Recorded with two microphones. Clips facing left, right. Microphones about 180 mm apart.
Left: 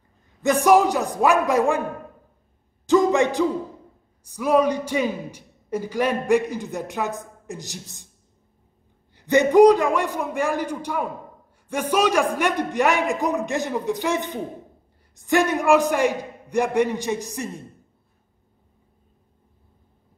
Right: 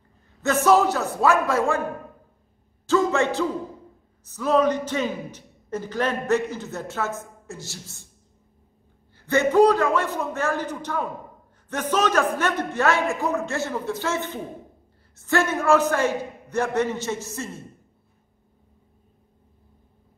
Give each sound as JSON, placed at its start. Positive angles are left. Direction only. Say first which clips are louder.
{"t": 0.4, "sound": "a man's voice", "louder": "left 2 dB", "side_deg": 15}
{"t": 2.9, "sound": "a sound", "louder": "left 3 dB", "side_deg": 15}
{"t": 4.2, "sound": "a man's voice", "louder": "left 1 dB", "side_deg": 10}
{"t": 9.1, "sound": "a man's voice", "louder": "left 3 dB", "side_deg": 15}